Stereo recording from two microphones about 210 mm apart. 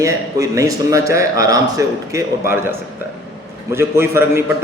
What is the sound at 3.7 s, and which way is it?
Speech, 10° right (ahead or behind).